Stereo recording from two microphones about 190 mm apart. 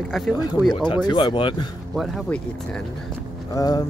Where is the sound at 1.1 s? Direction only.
25° left (ahead or behind).